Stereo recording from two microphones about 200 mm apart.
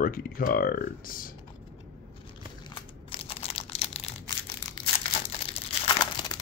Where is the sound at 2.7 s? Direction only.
25° left (ahead or behind).